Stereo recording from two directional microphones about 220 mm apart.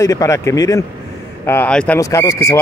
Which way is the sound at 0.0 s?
15° left (ahead or behind).